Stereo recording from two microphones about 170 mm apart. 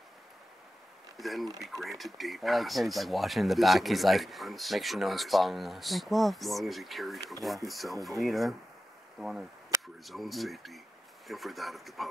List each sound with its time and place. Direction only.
1.1 s speech: centre (ahead or behind)
9.7 s a sound: 15° right (ahead or behind)
10.0 s speech: centre (ahead or behind)